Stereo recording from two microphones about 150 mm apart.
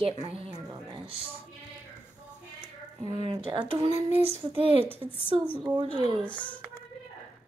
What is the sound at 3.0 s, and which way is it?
A woman's voice, 35° right (ahead or behind).